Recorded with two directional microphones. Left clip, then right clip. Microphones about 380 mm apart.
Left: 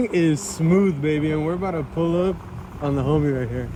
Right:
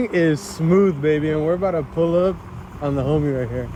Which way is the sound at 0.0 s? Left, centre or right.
Centre.